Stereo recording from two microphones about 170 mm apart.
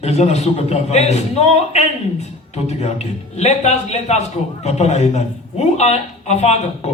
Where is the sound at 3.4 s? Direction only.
40° left (ahead or behind).